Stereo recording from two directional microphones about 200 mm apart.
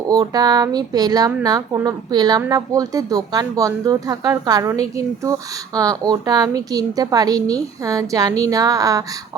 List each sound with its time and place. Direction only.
0.1 s speech: 20° right (ahead or behind)